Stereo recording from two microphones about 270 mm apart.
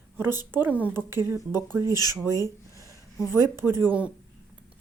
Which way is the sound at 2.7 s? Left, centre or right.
Centre.